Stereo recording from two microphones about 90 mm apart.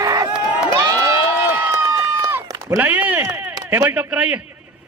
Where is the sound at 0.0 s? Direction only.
45° right (ahead or behind).